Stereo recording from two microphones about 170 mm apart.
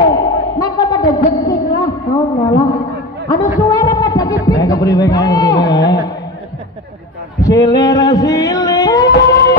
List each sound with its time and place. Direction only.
0.1 s a sound: 20° left (ahead or behind)
1.3 s a man's voice: 20° left (ahead or behind)
7.3 s singing: 20° left (ahead or behind)